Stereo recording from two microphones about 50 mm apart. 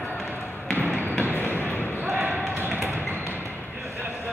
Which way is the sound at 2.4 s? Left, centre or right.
Right.